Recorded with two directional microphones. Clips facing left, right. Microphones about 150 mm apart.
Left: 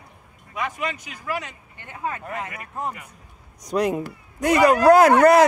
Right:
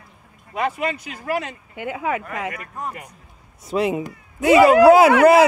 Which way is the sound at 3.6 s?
5° right (ahead or behind).